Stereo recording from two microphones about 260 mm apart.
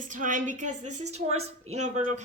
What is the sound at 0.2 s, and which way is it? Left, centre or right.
A woman's voice, right.